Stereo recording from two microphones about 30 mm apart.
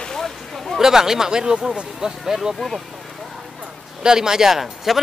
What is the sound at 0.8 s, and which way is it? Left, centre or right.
Speech, centre.